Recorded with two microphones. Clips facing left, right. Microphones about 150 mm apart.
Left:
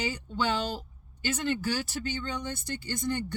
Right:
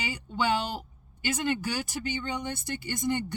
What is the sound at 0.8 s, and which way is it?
Speech, 15° right (ahead or behind).